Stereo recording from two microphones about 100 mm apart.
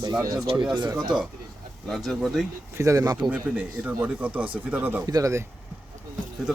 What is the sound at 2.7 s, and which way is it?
Speech, 35° right (ahead or behind).